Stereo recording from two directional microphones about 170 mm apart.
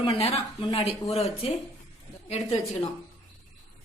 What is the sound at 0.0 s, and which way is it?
Speech, 35° left (ahead or behind).